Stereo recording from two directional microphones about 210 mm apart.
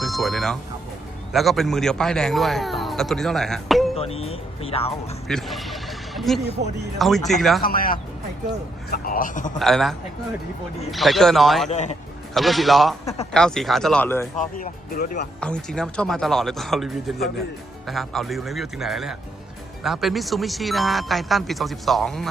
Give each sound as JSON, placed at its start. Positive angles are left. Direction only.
{"t": 0.0, "sound": "speech", "side_deg": 0}
{"t": 3.9, "sound": "speech", "side_deg": 30}
{"t": 5.3, "sound": "a sound", "side_deg": 0}
{"t": 7.3, "sound": "speech", "side_deg": 0}
{"t": 7.6, "sound": "a man's voice", "side_deg": 45}
{"t": 9.6, "sound": "speech", "side_deg": 0}
{"t": 10.9, "sound": "speech", "side_deg": 0}
{"t": 11.7, "sound": "speech", "side_deg": 30}
{"t": 12.3, "sound": "speech", "side_deg": 0}
{"t": 14.3, "sound": "speech", "side_deg": 40}
{"t": 15.4, "sound": "speech", "side_deg": 5}